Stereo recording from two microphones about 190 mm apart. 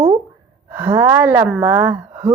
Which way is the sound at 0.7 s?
10° right (ahead or behind).